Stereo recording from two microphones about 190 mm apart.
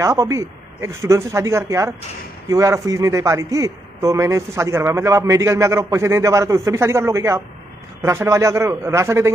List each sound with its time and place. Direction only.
0.0 s a man's voice: 15° right (ahead or behind)